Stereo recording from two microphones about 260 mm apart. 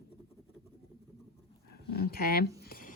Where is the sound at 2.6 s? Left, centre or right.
Left.